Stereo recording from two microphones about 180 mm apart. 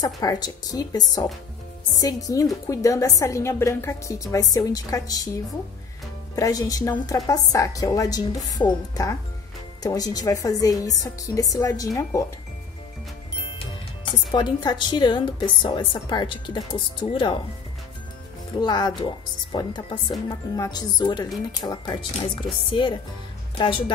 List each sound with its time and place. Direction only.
0.0 s a woman's voice: 20° left (ahead or behind)
14.3 s a woman's voice: 20° left (ahead or behind)
18.5 s a woman's voice: 25° left (ahead or behind)